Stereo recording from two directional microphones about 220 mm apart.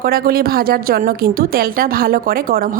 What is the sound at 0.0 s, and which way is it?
Speech, 45° right (ahead or behind).